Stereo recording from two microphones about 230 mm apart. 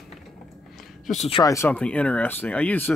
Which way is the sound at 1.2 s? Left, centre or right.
Centre.